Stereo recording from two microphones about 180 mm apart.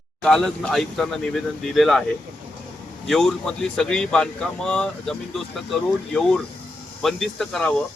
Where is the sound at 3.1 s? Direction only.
5° left (ahead or behind).